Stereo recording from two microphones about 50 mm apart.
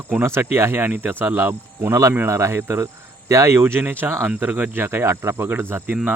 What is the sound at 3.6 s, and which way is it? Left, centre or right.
Speech, right.